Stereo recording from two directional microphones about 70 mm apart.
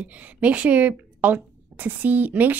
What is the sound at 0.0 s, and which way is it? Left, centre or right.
A woman's voice, centre.